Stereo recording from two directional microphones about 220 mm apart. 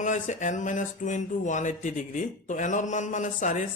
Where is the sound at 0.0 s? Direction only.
35° left (ahead or behind).